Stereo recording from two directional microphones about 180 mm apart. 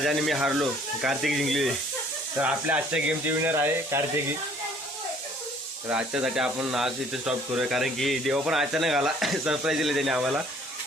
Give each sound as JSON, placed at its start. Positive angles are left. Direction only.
{"t": 0.0, "sound": "speech", "side_deg": 0}
{"t": 5.9, "sound": "speech", "side_deg": -5}